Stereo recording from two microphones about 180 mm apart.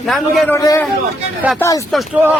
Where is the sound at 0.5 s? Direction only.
20° left (ahead or behind).